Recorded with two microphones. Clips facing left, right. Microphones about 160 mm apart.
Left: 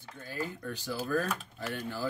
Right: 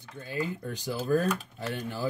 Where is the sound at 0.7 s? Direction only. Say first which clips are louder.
Right 5 dB; 20° right (ahead or behind).